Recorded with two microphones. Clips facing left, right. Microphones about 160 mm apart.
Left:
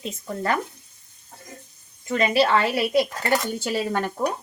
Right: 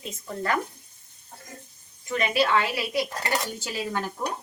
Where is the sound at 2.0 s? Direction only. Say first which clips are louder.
Left 4 dB; 35° left (ahead or behind); by 4.1 s 65° left (ahead or behind).